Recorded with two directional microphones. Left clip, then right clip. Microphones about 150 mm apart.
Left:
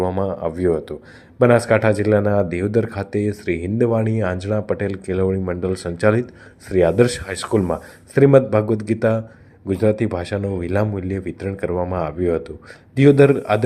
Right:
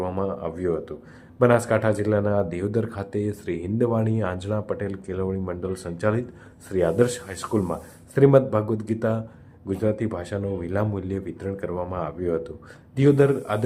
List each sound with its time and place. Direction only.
0.2 s speech: 30° left (ahead or behind)